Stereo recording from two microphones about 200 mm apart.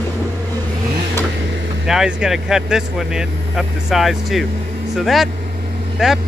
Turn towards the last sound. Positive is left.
turn(degrees=0)  # may be behind; listen again after turning